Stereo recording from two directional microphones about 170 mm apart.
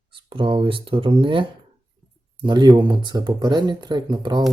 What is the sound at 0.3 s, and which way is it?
Speech, 30° right (ahead or behind).